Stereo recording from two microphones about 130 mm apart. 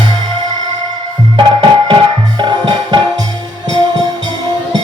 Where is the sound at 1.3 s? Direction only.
40° right (ahead or behind).